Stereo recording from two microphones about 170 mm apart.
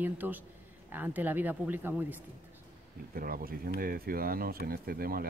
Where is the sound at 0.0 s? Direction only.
10° right (ahead or behind).